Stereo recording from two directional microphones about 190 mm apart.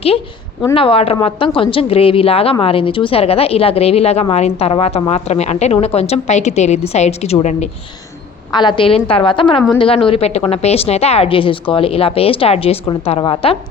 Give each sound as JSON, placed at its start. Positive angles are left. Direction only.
{"t": 0.7, "sound": "a woman's voice", "side_deg": 30}
{"t": 8.5, "sound": "a woman's voice", "side_deg": 25}